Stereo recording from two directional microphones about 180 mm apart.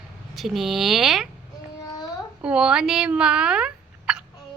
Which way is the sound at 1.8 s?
20° left (ahead or behind).